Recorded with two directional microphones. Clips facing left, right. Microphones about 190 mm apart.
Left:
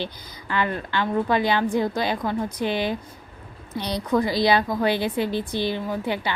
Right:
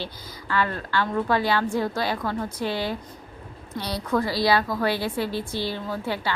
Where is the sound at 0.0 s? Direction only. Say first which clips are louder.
Left 3 dB; 20° left (ahead or behind).